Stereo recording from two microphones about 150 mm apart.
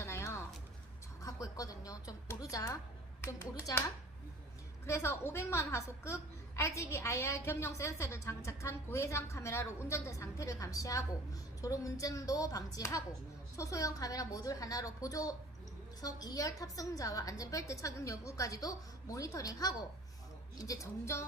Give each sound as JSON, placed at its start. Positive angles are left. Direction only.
{"t": 0.0, "sound": "a sound", "side_deg": 20}
{"t": 1.2, "sound": "music", "side_deg": 25}
{"t": 3.2, "sound": "a woman's voice", "side_deg": 20}
{"t": 4.9, "sound": "a woman's voice", "side_deg": 20}